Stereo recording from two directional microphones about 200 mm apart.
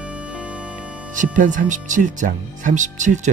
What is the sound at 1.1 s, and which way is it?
Speech, 40° right (ahead or behind).